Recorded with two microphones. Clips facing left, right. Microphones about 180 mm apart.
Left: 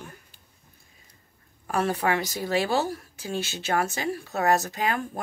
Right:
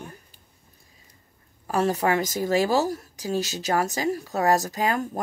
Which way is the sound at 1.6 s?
35° right (ahead or behind).